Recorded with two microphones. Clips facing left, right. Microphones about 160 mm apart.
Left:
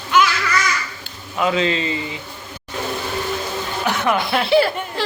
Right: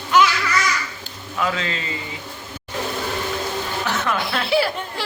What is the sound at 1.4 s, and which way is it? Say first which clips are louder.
Speech: left 6 dB; 20° left (ahead or behind).